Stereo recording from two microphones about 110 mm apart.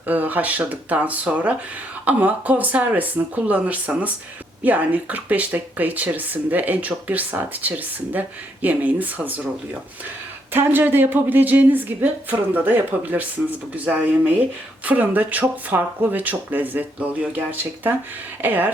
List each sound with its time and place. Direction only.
0.0 s speech: 15° right (ahead or behind)
10.5 s speech: 20° right (ahead or behind)